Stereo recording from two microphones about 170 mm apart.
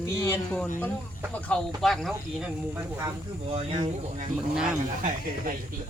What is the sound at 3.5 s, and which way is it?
Speech, 35° right (ahead or behind).